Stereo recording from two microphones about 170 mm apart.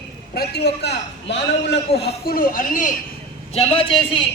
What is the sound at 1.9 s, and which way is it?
Speech, 65° left (ahead or behind).